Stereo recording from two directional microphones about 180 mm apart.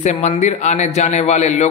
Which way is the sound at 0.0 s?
40° left (ahead or behind).